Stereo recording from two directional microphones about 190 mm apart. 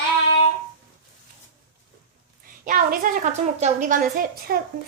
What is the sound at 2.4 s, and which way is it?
A woman's voice, 45° right (ahead or behind).